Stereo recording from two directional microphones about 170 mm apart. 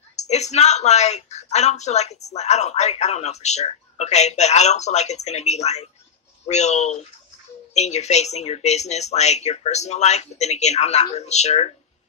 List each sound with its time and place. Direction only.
0.1 s a woman's voice: 40° left (ahead or behind)